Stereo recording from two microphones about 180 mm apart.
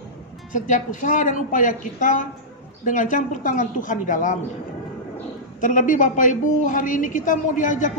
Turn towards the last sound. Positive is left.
turn(degrees=45)  # may be behind; listen again after turning